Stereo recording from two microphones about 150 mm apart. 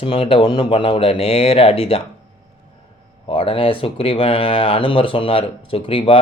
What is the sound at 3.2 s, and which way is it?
Speech, 35° left (ahead or behind).